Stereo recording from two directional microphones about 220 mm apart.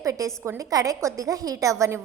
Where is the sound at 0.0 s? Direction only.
15° right (ahead or behind).